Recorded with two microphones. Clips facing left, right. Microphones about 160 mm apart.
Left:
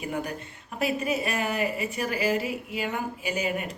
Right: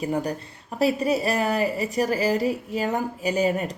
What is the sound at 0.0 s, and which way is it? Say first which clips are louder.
Speech: right 6 dB; 35° right (ahead or behind).